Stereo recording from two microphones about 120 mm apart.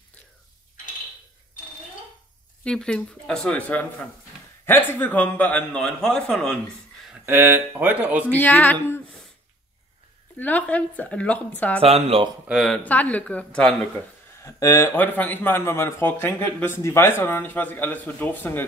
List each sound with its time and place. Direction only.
2.6 s a man's voice: 5° left (ahead or behind)
7.2 s speech: 15° right (ahead or behind)
8.3 s a man's voice: 15° left (ahead or behind)
10.3 s a man's voice: 15° left (ahead or behind)
11.8 s speech: 55° right (ahead or behind)
12.5 s a man's voice: 5° left (ahead or behind)
14.4 s speech: 25° left (ahead or behind)
15.0 s a man's voice: 15° left (ahead or behind)